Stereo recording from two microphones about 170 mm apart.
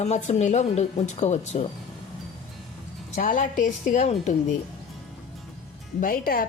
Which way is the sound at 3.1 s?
45° left (ahead or behind).